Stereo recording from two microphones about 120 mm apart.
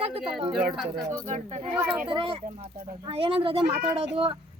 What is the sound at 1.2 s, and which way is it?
Speech, 85° right.